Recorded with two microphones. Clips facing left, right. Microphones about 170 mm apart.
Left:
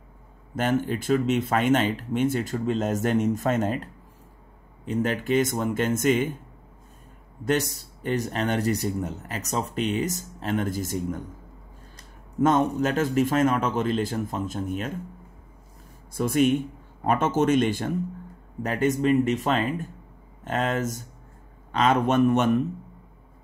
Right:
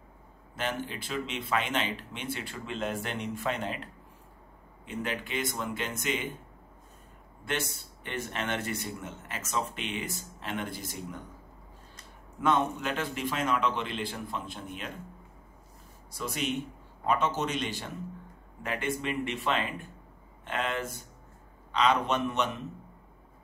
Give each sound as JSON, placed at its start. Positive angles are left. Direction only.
{"t": 0.6, "sound": "speech", "side_deg": 45}
{"t": 4.8, "sound": "speech", "side_deg": 40}
{"t": 7.4, "sound": "speech", "side_deg": 40}
{"t": 12.4, "sound": "speech", "side_deg": 40}
{"t": 16.1, "sound": "a man's voice", "side_deg": 50}